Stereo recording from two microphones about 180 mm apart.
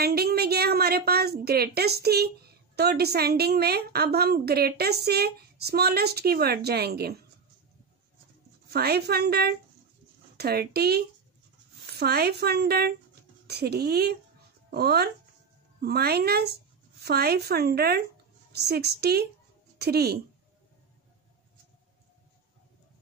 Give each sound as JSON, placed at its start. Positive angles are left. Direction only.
{"t": 0.0, "sound": "a woman's voice", "side_deg": -60}
{"t": 8.6, "sound": "a woman's voice", "side_deg": -65}